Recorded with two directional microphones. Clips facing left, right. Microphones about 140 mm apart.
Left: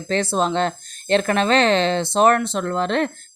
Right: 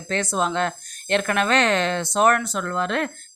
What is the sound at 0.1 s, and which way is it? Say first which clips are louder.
Speech: left 3 dB; 30° left (ahead or behind).